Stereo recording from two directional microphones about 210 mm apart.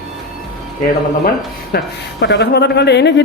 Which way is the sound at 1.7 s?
55° left (ahead or behind).